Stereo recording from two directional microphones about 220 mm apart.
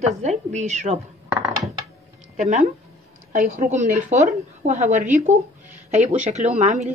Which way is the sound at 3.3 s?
35° right (ahead or behind).